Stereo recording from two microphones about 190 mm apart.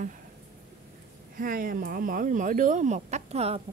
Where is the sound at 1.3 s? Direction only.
45° right (ahead or behind).